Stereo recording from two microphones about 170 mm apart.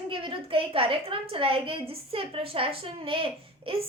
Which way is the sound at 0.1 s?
30° right (ahead or behind).